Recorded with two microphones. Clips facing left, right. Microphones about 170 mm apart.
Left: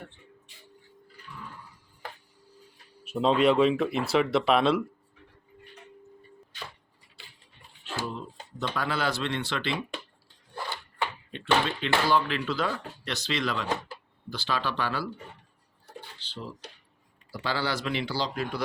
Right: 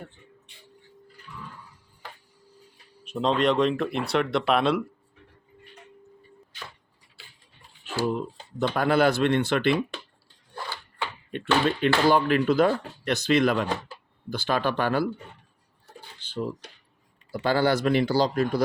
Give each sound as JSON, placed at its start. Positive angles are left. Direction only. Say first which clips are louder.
{"t": 3.0, "sound": "speech", "louder": "left 1 dB", "side_deg": 5}
{"t": 8.0, "sound": "speech", "louder": "right 9 dB", "side_deg": -50}
{"t": 11.3, "sound": "speech", "louder": "right 4 dB", "side_deg": -50}
{"t": 16.2, "sound": "dishes", "louder": "right 11 dB", "side_deg": -50}
{"t": 17.3, "sound": "speech", "louder": "right 8 dB", "side_deg": -50}